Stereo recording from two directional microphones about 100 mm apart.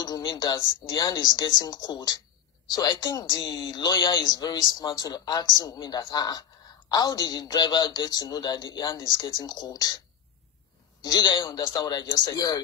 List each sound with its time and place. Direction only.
0.0 s a man's voice: 45° left (ahead or behind)
11.0 s a man's voice: 45° left (ahead or behind)